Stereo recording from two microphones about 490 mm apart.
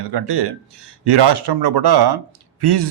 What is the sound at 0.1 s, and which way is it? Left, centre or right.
Speech, right.